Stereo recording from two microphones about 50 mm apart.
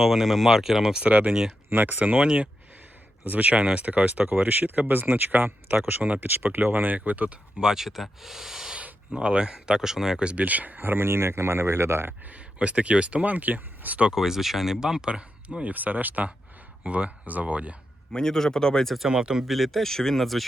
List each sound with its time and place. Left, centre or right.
0.0 s speech: centre
1.0 s speech: right
4.3 s speech: right
7.6 s speech: centre
8.7 s speech: centre
9.7 s speech: centre
10.4 s speech: right
12.2 s speech: right
14.0 s speech: centre
15.1 s speech: right
18.1 s speech: centre
18.9 s speech: centre
19.5 s speech: centre